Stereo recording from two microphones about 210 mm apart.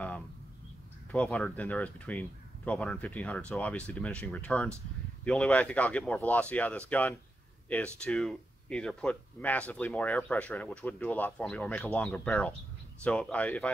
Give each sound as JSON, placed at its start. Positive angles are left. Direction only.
{"t": 1.1, "sound": "speech", "side_deg": 5}